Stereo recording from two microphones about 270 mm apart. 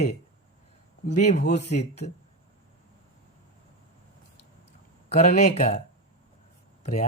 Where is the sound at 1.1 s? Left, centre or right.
Left.